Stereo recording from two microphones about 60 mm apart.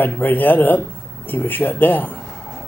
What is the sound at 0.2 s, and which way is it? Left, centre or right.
Speech, left.